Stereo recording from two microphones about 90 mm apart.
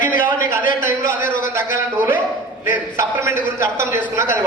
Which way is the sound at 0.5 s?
30° right (ahead or behind).